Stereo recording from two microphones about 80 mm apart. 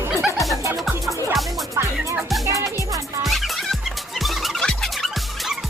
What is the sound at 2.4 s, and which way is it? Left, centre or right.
Music, right.